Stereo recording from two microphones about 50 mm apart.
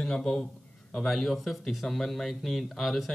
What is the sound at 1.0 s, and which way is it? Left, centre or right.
A man's voice, centre.